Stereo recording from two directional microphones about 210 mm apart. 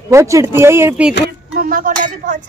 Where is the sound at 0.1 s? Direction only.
15° right (ahead or behind).